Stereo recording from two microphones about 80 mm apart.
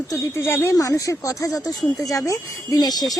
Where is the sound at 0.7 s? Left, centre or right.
Left.